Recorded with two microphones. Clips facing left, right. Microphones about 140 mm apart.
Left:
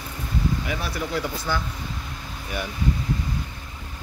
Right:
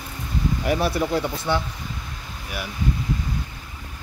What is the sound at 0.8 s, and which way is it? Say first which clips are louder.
Speech: right 5 dB; 25° right (ahead or behind).